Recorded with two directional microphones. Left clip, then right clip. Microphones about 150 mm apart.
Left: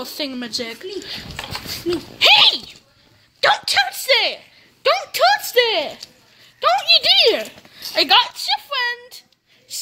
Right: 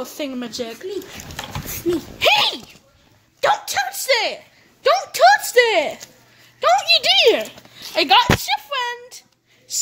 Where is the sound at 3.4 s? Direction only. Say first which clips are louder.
Left 3 dB; centre (ahead or behind).